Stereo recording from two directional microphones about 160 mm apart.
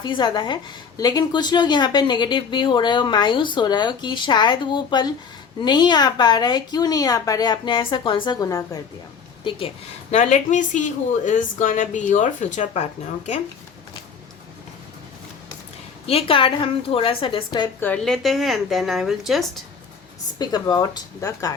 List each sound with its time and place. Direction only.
0.0 s a woman's voice: 30° left (ahead or behind)
9.4 s speech: 30° left (ahead or behind)
10.1 s speech: 45° left (ahead or behind)
16.0 s a woman's voice: 35° left (ahead or behind)
17.7 s a woman's voice: 10° left (ahead or behind)
20.4 s a woman's voice: 25° left (ahead or behind)